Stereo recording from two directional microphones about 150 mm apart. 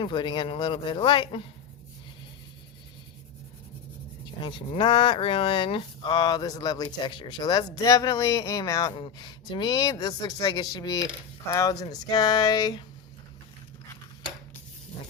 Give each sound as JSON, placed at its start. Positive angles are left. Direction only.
{"t": 0.0, "sound": "speech", "side_deg": 35}
{"t": 4.4, "sound": "speech", "side_deg": 35}